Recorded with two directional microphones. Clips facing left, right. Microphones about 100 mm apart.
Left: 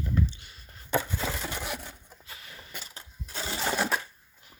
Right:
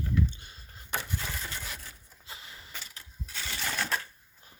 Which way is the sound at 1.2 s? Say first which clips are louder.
Left 6 dB; 90° left.